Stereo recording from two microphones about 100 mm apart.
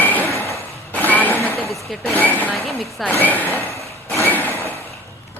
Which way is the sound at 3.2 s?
15° left (ahead or behind).